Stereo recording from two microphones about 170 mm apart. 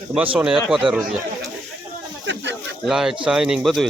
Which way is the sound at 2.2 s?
90° right.